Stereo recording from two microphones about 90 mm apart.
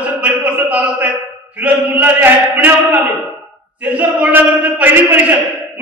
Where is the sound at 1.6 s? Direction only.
15° right (ahead or behind).